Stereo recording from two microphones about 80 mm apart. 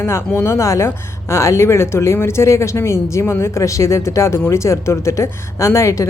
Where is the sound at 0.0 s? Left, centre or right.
Left.